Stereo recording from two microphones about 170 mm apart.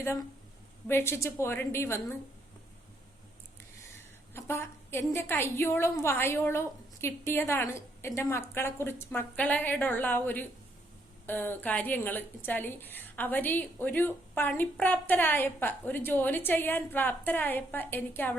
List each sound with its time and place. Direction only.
0.9 s a woman's voice: 15° left (ahead or behind)
4.4 s a woman's voice: 15° left (ahead or behind)